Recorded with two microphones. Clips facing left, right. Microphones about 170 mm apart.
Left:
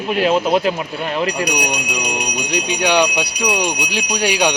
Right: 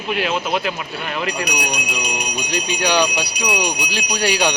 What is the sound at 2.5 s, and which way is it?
Speech, 15° left (ahead or behind).